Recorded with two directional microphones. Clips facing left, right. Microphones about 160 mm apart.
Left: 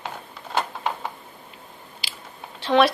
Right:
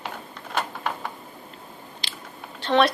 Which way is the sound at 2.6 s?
Centre (ahead or behind).